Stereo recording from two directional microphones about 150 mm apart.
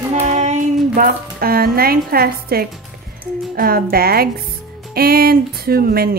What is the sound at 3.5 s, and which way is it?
Speech, 75° right (ahead or behind).